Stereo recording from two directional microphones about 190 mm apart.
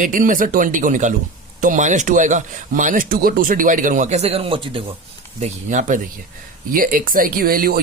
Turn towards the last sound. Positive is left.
turn(degrees=-50)  # may be behind; listen again after turning